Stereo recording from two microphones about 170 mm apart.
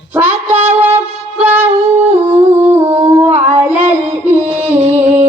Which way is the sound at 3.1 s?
10° right (ahead or behind).